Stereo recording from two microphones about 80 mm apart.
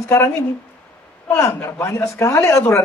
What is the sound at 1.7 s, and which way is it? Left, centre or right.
Speech, left.